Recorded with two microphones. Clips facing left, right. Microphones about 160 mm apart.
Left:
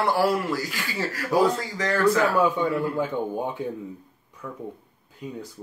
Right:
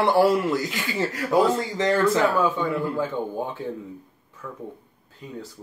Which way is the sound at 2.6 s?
15° left (ahead or behind).